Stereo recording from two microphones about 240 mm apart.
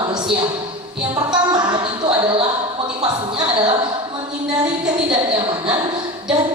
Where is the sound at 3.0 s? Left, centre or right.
Centre.